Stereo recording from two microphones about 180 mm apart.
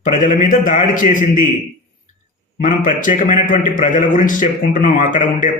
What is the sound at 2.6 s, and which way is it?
A man's voice, 45° left (ahead or behind).